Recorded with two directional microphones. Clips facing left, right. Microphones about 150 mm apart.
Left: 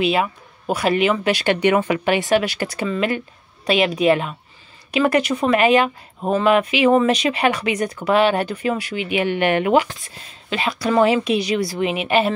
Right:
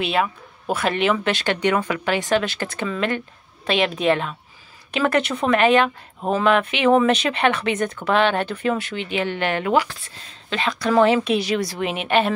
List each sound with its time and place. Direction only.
0.0 s speech: 5° left (ahead or behind)
1.4 s speech: 15° left (ahead or behind)